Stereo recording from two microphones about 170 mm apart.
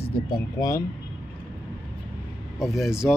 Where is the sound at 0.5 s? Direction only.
20° left (ahead or behind).